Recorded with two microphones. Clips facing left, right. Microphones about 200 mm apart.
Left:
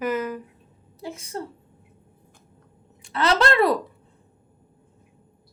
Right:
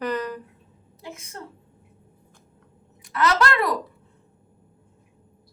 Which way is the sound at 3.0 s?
30° left (ahead or behind).